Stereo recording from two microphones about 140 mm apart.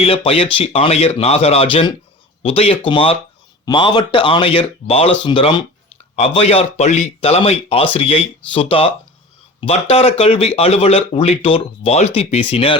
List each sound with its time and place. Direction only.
0.0 s speech: 45° left (ahead or behind)
6.1 s speech: 45° left (ahead or behind)
9.9 s speech: 45° left (ahead or behind)